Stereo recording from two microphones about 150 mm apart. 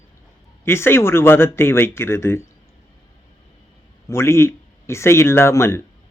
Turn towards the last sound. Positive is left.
turn(degrees=15)  # may be behind; listen again after turning